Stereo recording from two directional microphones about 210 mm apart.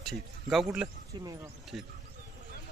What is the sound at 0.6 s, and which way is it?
Speech, 10° right (ahead or behind).